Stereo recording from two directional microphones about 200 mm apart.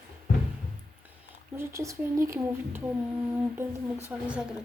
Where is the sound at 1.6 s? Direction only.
15° right (ahead or behind).